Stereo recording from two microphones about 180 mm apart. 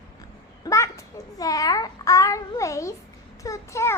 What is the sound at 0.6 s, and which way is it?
A child's voice, 15° left (ahead or behind).